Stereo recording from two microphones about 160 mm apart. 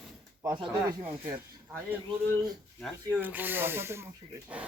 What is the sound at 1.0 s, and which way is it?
Speech, 10° right (ahead or behind).